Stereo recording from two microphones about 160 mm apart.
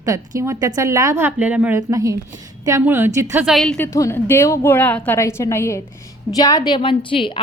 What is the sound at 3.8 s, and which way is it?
A woman's voice, 20° left (ahead or behind).